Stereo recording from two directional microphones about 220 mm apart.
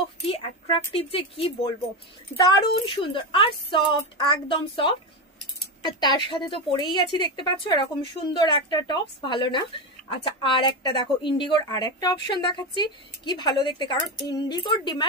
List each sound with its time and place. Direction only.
0.3 s speech: 25° left (ahead or behind)